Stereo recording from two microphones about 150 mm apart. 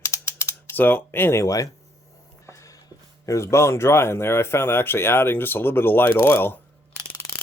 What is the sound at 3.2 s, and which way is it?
Speech, 20° left (ahead or behind).